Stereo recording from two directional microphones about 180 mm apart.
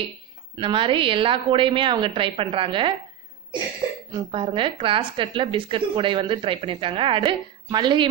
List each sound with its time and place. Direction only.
0.6 s a woman's voice: 30° right (ahead or behind)
4.1 s a woman's voice: 30° right (ahead or behind)